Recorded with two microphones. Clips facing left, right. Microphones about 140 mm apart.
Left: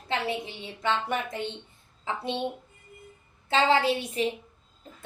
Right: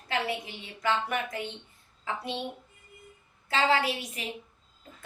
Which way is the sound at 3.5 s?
25° left (ahead or behind).